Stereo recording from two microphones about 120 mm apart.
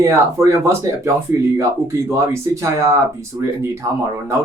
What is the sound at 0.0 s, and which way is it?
Speech, 25° right (ahead or behind).